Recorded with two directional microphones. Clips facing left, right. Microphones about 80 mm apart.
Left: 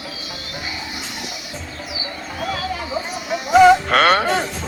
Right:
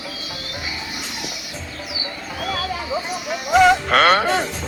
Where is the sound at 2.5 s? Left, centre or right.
Centre.